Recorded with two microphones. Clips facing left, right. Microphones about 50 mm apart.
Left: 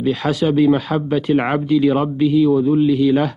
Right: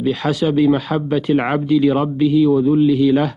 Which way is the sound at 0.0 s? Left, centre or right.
Centre.